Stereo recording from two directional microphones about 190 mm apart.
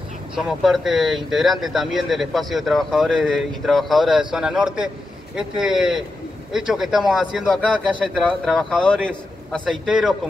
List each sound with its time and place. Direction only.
0.4 s speech: centre (ahead or behind)